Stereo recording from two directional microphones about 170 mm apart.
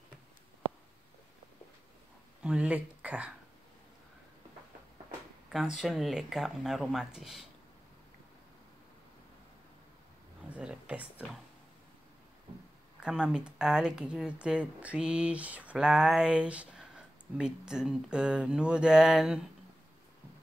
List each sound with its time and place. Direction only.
2.4 s speech: 5° right (ahead or behind)
5.5 s speech: centre (ahead or behind)
10.5 s speech: 10° right (ahead or behind)
13.0 s speech: 5° right (ahead or behind)